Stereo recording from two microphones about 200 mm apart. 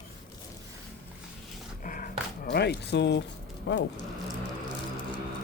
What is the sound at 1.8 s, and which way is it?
Dog, 40° left (ahead or behind).